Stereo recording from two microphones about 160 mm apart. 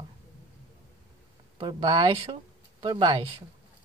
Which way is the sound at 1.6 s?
25° right (ahead or behind).